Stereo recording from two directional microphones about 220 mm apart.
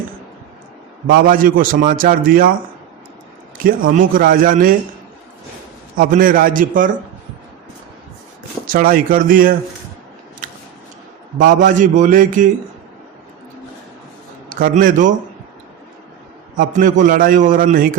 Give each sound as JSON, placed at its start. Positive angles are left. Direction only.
{"t": 1.1, "sound": "a man's voice", "side_deg": -40}
{"t": 3.6, "sound": "a man's voice", "side_deg": -40}
{"t": 6.0, "sound": "a man's voice", "side_deg": -40}
{"t": 8.6, "sound": "a man's voice", "side_deg": -40}
{"t": 11.3, "sound": "a man's voice", "side_deg": -35}
{"t": 14.5, "sound": "a man's voice", "side_deg": -40}
{"t": 16.6, "sound": "a man's voice", "side_deg": -35}